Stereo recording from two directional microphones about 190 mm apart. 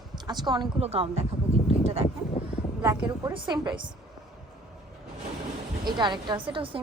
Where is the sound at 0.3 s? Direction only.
25° right (ahead or behind).